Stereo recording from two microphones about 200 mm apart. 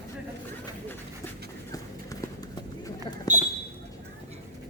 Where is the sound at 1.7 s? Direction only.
15° left (ahead or behind).